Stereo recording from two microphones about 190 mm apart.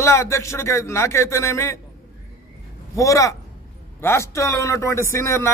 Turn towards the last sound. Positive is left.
turn(degrees=15)  # may be behind; listen again after turning